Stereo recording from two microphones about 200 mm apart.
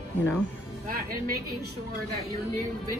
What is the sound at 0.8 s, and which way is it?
Speech, 45° right (ahead or behind).